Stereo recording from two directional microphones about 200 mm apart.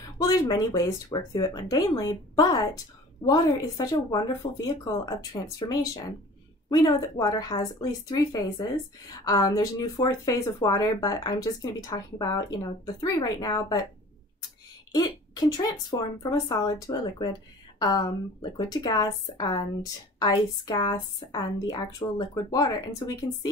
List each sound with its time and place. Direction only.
0.2 s speech: 20° left (ahead or behind)
15.0 s speech: 20° left (ahead or behind)